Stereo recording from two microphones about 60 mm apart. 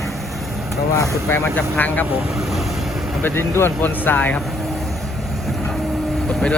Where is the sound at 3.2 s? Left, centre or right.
Left.